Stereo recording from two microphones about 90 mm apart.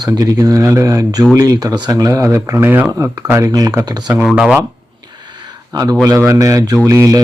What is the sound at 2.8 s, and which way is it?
Speech, 40° right (ahead or behind).